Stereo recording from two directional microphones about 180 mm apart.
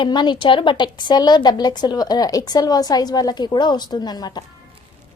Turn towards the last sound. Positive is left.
turn(degrees=20)  # may be behind; listen again after turning